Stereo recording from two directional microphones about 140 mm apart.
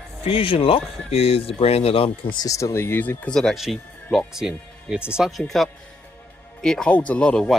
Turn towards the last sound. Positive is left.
turn(degrees=5)  # may be behind; listen again after turning